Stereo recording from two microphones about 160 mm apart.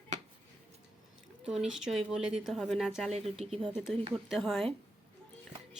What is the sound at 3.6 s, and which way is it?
A woman's voice, 5° right (ahead or behind).